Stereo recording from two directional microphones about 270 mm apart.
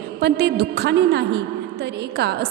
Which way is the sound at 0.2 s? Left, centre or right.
Right.